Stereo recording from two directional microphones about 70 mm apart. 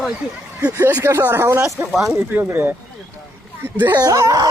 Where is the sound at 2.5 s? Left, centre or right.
Right.